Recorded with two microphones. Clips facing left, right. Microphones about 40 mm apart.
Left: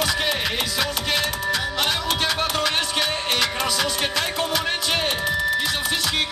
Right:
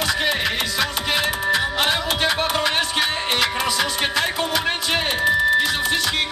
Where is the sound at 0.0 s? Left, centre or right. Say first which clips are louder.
Right 2 dB; centre.